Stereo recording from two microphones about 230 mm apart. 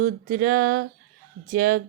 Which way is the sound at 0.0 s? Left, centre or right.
Right.